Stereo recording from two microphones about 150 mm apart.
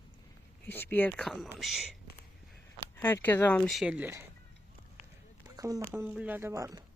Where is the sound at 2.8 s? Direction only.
15° left (ahead or behind).